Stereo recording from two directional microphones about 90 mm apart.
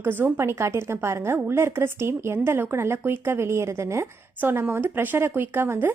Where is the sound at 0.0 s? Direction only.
20° right (ahead or behind).